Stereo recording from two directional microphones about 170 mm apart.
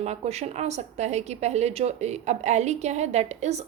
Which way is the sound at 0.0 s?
40° right (ahead or behind).